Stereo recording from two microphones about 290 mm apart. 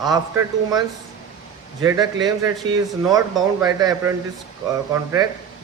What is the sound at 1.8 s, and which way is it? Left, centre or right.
Speech, centre.